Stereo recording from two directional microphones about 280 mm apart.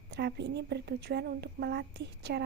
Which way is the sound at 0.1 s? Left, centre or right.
Right.